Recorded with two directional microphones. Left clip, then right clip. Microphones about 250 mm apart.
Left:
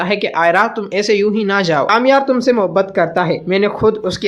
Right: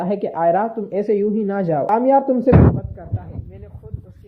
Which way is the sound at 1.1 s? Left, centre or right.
Centre.